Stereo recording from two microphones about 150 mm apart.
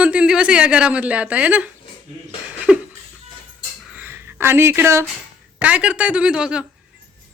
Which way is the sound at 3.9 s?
10° right (ahead or behind).